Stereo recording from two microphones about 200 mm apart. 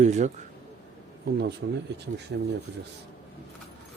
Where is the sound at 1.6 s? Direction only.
60° right (ahead or behind).